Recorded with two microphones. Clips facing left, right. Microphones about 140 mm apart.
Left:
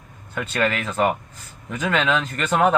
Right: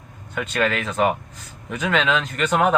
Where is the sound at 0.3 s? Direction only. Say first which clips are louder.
Even; centre (ahead or behind).